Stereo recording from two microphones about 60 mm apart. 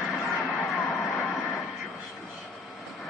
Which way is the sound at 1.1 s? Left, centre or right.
Centre.